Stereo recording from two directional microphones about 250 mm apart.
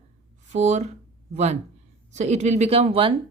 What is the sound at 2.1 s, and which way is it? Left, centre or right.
A woman's voice, right.